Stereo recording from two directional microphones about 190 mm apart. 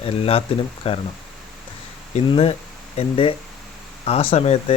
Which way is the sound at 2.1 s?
30° left (ahead or behind).